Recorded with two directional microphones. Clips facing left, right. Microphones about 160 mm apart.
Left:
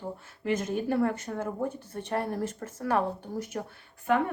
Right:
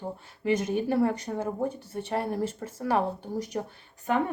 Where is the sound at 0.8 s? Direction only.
15° right (ahead or behind).